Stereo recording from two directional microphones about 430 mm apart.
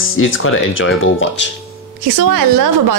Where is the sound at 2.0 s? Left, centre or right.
Right.